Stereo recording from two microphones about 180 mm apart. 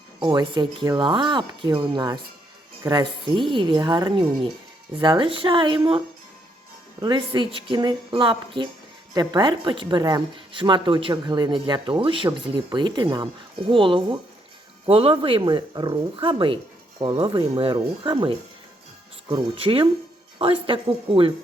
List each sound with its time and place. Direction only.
0.2 s speech: 25° right (ahead or behind)
7.0 s speech: 25° right (ahead or behind)